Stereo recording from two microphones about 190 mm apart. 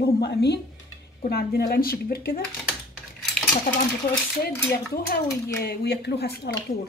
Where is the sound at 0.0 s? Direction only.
60° left (ahead or behind).